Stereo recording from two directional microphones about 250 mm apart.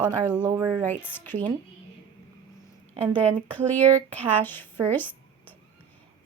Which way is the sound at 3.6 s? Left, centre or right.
Centre.